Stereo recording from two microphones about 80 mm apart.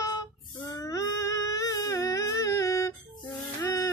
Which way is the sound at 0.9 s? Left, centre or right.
Left.